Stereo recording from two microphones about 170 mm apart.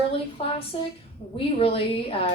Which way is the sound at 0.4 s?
35° left (ahead or behind).